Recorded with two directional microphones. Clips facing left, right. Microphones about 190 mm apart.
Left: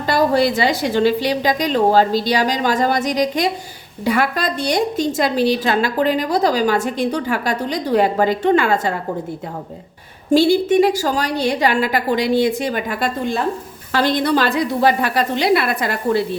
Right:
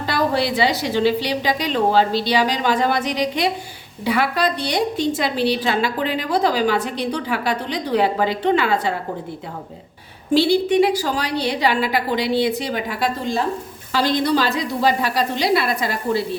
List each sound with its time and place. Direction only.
0.0 s a woman's voice: 45° left (ahead or behind)
10.3 s a woman's voice: 45° left (ahead or behind)